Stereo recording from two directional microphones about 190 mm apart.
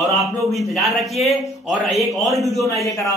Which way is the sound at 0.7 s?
Centre (ahead or behind).